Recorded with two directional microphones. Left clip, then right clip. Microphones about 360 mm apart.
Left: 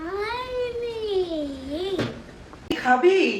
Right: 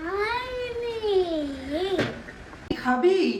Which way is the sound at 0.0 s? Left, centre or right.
Centre.